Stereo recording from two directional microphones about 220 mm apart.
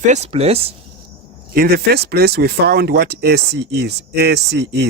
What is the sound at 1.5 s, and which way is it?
Speech, 45° right (ahead or behind).